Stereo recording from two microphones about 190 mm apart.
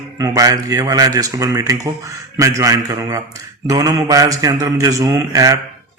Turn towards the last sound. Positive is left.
turn(degrees=-20)  # may be behind; listen again after turning